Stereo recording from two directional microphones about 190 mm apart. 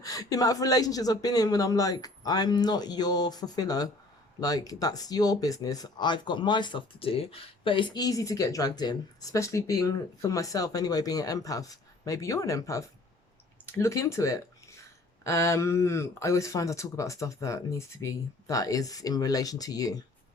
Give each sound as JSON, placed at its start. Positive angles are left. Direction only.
{"t": 0.0, "sound": "speech", "side_deg": 20}